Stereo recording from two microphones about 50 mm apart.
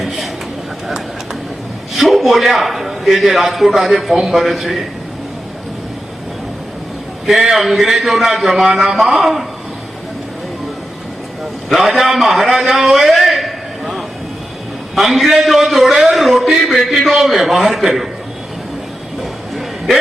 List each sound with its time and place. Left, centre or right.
2.0 s a man's voice: centre
7.3 s a man's voice: centre
11.7 s a man's voice: centre
19.2 s a sound: centre